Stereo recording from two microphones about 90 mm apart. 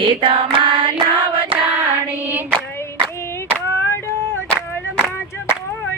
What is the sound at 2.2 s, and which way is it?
Female singing, 20° right (ahead or behind).